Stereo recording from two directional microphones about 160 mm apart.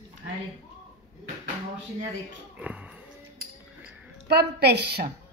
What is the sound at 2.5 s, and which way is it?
Speech, 10° right (ahead or behind).